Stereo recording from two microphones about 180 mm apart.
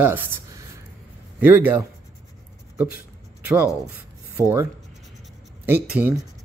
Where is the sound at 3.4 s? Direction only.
10° right (ahead or behind).